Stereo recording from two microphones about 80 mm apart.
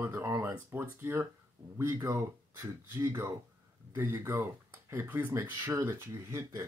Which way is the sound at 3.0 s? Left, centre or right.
Right.